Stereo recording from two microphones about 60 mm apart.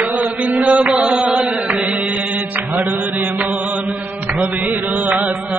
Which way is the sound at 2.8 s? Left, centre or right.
Right.